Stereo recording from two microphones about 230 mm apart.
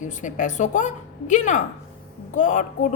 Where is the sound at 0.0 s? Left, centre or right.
Left.